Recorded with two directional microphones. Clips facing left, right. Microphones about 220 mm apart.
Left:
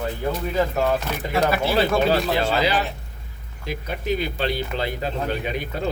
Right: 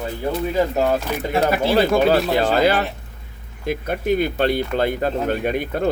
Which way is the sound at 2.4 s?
50° right (ahead or behind).